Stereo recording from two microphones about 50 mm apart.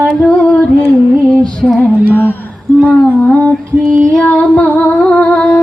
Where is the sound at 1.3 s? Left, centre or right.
Centre.